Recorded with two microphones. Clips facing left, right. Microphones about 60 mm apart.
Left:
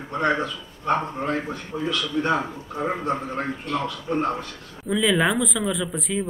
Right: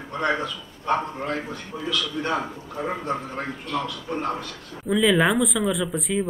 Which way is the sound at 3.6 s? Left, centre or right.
Left.